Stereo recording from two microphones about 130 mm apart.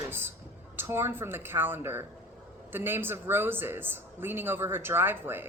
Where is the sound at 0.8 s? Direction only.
20° right (ahead or behind).